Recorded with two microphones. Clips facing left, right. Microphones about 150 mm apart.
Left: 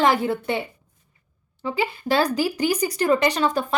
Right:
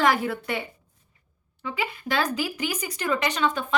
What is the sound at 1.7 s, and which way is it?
A woman's voice, 30° left (ahead or behind).